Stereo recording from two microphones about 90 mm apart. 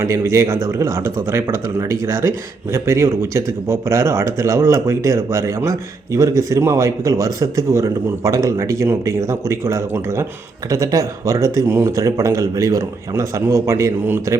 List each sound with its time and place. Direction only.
0.0 s a man's voice: 30° right (ahead or behind)